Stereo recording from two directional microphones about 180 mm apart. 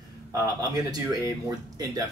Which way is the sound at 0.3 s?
20° right (ahead or behind).